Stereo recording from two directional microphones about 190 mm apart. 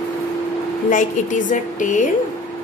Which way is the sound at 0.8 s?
40° left (ahead or behind).